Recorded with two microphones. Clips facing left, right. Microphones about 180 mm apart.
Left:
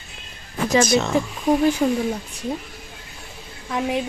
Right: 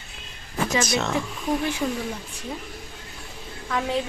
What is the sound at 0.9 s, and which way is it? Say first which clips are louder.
Speech: left 6 dB; centre (ahead or behind).